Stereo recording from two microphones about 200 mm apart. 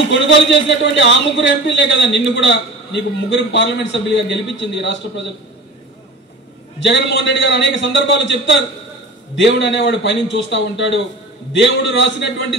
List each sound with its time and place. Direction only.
0.7 s a man's voice: 65° left (ahead or behind)
6.8 s a man's voice: 65° left (ahead or behind)